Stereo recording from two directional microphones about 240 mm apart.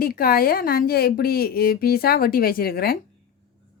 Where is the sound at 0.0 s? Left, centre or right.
Left.